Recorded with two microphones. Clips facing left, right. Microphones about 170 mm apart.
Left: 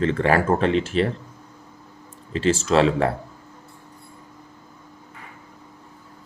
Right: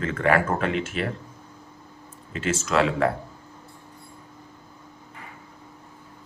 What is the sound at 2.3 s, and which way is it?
Speech, 30° left (ahead or behind).